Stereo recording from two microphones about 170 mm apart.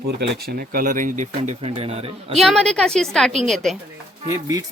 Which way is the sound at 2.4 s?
Centre (ahead or behind).